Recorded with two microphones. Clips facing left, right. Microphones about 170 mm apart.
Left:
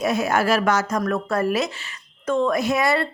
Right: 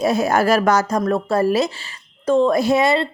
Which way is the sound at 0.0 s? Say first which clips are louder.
Right 4 dB; 35° right (ahead or behind).